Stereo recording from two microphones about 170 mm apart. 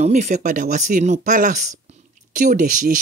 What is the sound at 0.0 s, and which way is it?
Speech, 45° right (ahead or behind).